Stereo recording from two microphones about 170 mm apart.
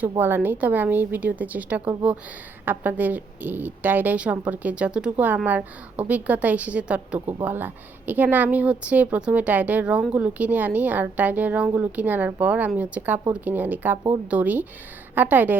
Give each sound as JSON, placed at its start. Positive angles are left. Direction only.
{"t": 0.2, "sound": "a woman's voice", "side_deg": -10}